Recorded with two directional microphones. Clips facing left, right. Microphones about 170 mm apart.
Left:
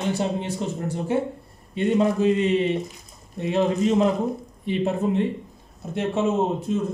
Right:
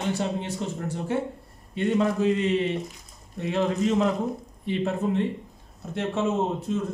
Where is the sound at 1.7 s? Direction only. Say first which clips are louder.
Left 3 dB; 20° left (ahead or behind).